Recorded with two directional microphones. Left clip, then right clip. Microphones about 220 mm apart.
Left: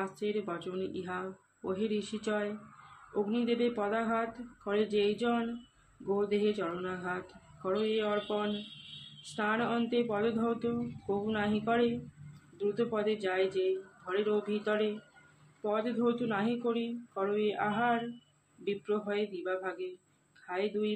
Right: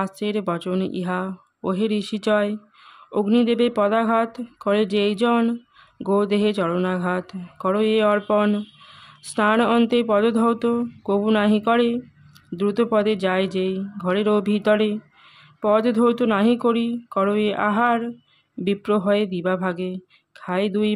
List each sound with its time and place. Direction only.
0.0 s speech: 50° right (ahead or behind)
9.3 s speech: 50° right (ahead or behind)